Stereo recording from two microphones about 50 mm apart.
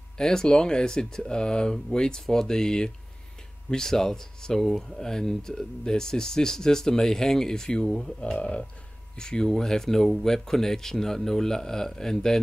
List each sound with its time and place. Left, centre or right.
0.2 s speech: centre
8.4 s a sound: left
9.1 s speech: centre